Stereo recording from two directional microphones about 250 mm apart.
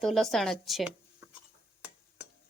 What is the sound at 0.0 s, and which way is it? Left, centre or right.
Speech, centre.